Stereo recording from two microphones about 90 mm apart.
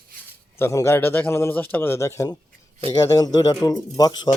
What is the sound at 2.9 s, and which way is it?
Speech, 40° left (ahead or behind).